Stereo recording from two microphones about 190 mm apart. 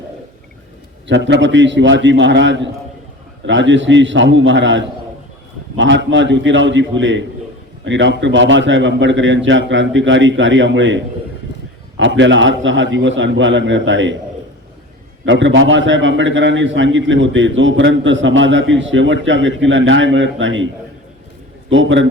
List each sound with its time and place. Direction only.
1.0 s a man's voice: 70° right (ahead or behind)
15.3 s a man's voice: 75° right (ahead or behind)
21.7 s a man's voice: 85° right